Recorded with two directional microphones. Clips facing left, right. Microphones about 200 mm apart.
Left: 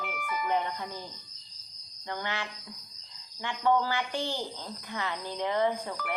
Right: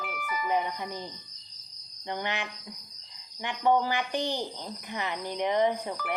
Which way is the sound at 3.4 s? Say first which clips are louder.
Right 2 dB; 20° right (ahead or behind).